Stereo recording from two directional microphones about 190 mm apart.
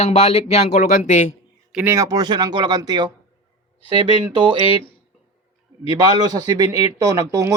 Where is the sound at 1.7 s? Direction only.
10° right (ahead or behind).